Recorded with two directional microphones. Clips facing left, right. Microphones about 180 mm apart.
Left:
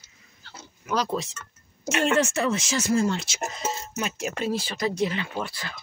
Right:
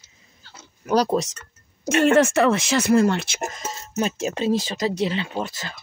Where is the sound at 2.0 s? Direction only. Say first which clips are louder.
Right 7 dB; 55° right (ahead or behind).